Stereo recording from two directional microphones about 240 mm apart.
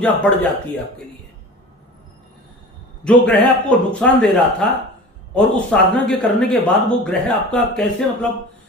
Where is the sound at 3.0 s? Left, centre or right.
Centre.